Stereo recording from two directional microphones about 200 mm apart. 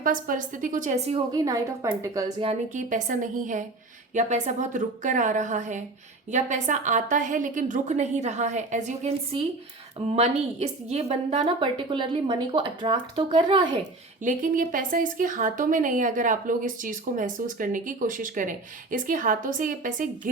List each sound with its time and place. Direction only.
0.0 s speech: 45° right (ahead or behind)
1.3 s a woman's voice: 15° right (ahead or behind)
2.4 s a woman's voice: 35° right (ahead or behind)
14.2 s speech: 40° right (ahead or behind)